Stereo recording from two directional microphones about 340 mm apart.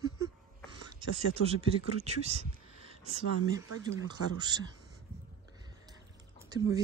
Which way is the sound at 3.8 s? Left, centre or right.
Centre.